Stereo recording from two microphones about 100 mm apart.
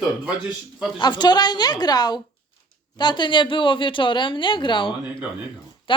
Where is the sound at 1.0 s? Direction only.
45° left (ahead or behind).